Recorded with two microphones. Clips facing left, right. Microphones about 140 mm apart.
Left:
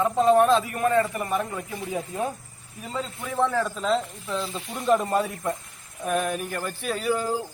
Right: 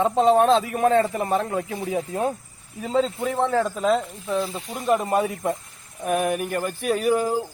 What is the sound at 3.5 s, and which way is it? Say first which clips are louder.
Speech: right 4 dB; 55° right (ahead or behind).